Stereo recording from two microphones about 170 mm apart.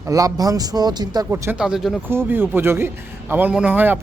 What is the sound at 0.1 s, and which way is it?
Speech, 20° right (ahead or behind).